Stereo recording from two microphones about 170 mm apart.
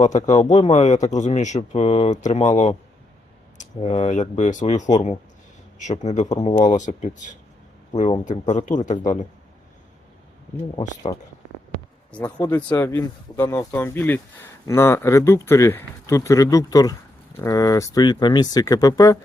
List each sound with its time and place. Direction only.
0.0 s speech: 45° left (ahead or behind)
3.8 s speech: 40° left (ahead or behind)
11.1 s speech: 35° left (ahead or behind)
12.2 s speech: 20° left (ahead or behind)